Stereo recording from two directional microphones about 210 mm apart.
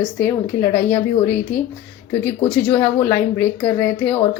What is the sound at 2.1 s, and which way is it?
A woman's voice, 10° left (ahead or behind).